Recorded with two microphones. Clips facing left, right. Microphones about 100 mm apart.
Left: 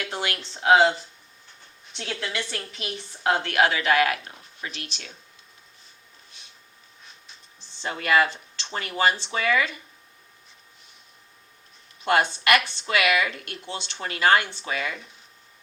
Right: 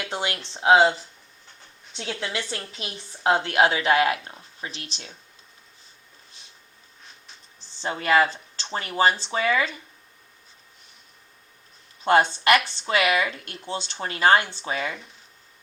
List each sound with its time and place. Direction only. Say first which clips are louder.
0.0 s a woman's voice: right 1 dB; 25° right (ahead or behind)
2.0 s a woman's voice: right 1 dB; 25° right (ahead or behind)
7.8 s a woman's voice: right 1 dB; 30° right (ahead or behind)
12.0 s a woman's voice: right 3 dB; 30° right (ahead or behind)